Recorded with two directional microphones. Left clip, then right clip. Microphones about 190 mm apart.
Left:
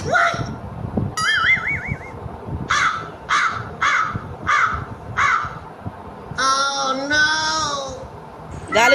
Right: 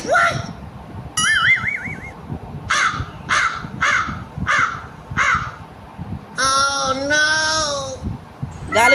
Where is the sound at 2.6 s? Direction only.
30° right (ahead or behind).